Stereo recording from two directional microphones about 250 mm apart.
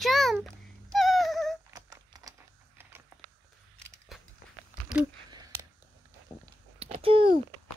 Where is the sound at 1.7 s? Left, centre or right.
Centre.